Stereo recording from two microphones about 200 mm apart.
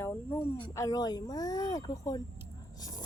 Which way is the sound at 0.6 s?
20° left (ahead or behind).